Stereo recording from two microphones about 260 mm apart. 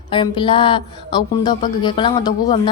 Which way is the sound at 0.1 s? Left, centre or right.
Centre.